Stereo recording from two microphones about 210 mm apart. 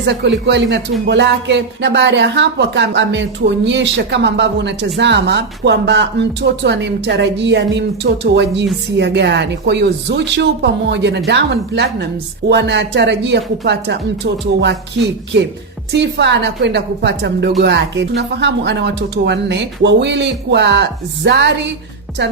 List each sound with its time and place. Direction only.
0.0 s speech: 55° right (ahead or behind)